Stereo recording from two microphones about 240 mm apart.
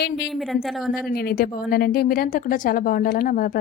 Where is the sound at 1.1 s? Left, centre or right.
Left.